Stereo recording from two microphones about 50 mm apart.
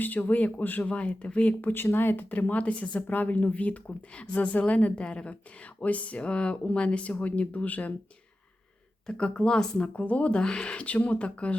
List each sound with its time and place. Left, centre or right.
0.0 s speech: left
1.7 s speech: left
9.0 s a woman's voice: centre